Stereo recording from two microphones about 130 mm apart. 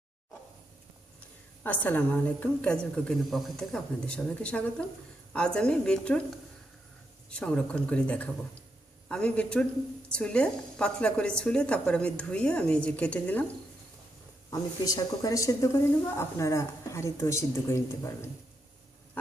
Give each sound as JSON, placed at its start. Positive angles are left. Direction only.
{"t": 1.6, "sound": "a woman's voice", "side_deg": 15}
{"t": 7.3, "sound": "a woman's voice", "side_deg": 10}
{"t": 14.8, "sound": "a woman's voice", "side_deg": 30}